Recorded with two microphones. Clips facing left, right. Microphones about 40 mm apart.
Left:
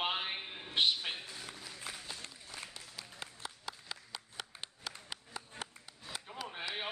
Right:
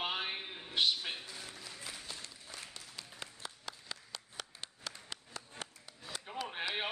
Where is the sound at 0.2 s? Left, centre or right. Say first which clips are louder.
Even; centre.